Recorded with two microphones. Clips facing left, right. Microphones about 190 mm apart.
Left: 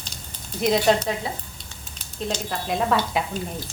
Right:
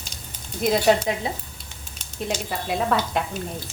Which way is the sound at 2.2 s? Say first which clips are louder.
Even; 5° right (ahead or behind).